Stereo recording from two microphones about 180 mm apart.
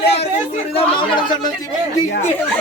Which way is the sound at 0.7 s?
25° left (ahead or behind).